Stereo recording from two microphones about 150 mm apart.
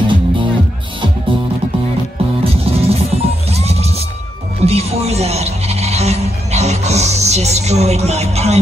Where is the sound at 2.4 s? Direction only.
40° right (ahead or behind).